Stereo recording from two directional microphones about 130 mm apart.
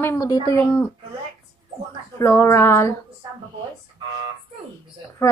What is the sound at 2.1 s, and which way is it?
Speech, 20° left (ahead or behind).